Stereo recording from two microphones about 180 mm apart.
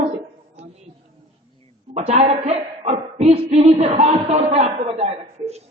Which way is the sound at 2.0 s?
35° right (ahead or behind).